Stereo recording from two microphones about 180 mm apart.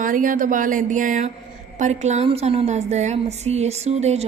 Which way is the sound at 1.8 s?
40° right (ahead or behind).